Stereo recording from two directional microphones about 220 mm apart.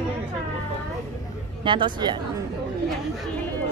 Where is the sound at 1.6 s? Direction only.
20° right (ahead or behind).